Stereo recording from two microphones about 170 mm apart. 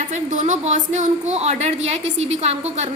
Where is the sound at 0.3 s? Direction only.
45° right (ahead or behind).